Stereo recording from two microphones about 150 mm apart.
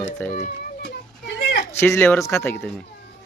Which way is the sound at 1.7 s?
15° left (ahead or behind).